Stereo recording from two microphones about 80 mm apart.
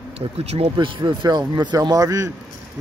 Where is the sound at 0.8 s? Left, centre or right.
Right.